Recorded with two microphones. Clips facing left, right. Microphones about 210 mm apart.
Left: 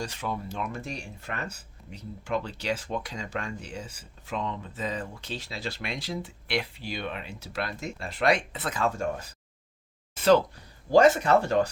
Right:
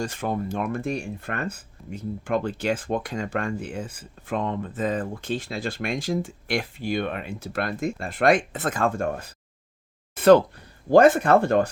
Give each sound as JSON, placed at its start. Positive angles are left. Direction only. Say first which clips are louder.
{"t": 0.0, "sound": "speech", "louder": "right 6 dB", "side_deg": -50}